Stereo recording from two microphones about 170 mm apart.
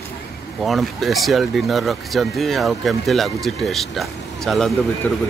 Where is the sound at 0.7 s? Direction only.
Centre (ahead or behind).